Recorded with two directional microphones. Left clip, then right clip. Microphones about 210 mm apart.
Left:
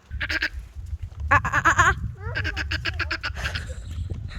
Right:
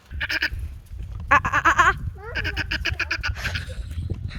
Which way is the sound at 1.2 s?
Centre (ahead or behind).